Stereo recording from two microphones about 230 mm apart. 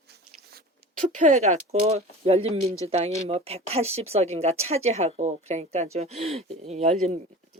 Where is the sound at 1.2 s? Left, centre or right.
Right.